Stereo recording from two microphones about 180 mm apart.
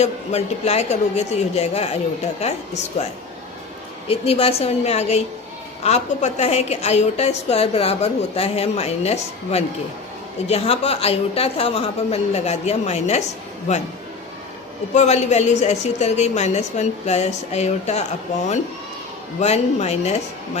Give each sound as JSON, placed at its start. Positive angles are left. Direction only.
{"t": 0.0, "sound": "a woman's voice", "side_deg": 40}
{"t": 14.9, "sound": "a woman's voice", "side_deg": 40}
{"t": 19.4, "sound": "a woman's voice", "side_deg": 35}